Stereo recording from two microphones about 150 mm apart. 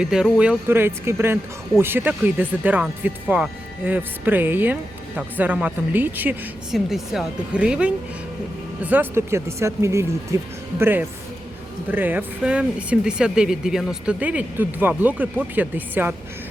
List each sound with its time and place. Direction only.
0.0 s speech: 5° right (ahead or behind)